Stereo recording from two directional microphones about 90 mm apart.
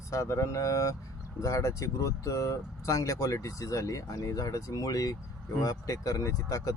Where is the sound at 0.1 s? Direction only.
35° left (ahead or behind).